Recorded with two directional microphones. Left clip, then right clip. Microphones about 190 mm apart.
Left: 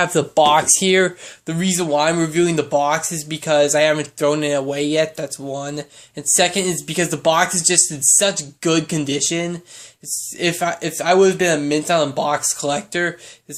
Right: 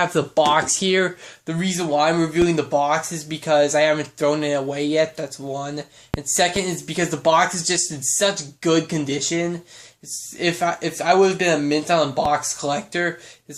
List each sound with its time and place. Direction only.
0.0 s speech: 20° left (ahead or behind)